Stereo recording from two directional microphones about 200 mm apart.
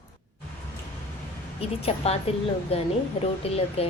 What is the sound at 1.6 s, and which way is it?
A woman's voice, 30° left (ahead or behind).